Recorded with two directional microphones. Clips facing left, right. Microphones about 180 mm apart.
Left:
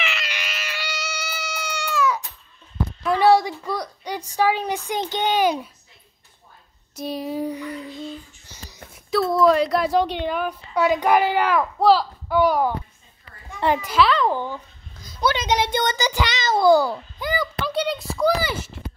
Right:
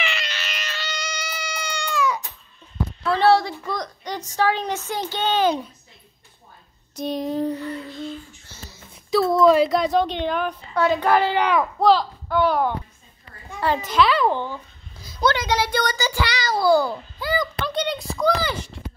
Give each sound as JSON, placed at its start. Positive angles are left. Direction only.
{"t": 0.0, "sound": "cat", "side_deg": 0}
{"t": 3.0, "sound": "a woman's voice", "side_deg": 15}
{"t": 7.0, "sound": "a woman's voice", "side_deg": 5}
{"t": 9.1, "sound": "a woman's voice", "side_deg": 0}
{"t": 13.8, "sound": "a child's voice", "side_deg": 5}